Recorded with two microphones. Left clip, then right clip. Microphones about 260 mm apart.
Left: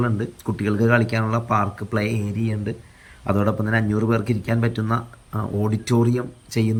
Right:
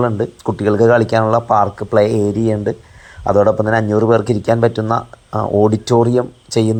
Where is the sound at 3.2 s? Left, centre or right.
Right.